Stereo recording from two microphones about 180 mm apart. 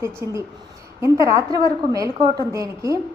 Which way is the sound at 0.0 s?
15° right (ahead or behind).